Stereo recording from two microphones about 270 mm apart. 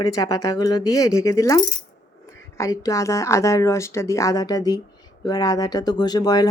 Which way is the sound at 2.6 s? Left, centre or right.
Centre.